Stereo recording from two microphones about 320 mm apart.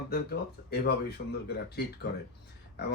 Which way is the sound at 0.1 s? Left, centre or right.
Left.